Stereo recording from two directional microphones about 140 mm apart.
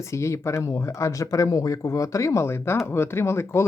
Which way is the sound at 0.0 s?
20° left (ahead or behind).